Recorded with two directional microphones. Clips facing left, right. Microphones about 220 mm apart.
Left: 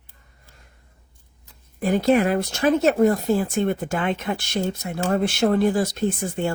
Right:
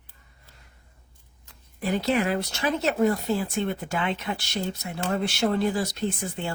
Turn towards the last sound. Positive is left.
turn(degrees=50)  # may be behind; listen again after turning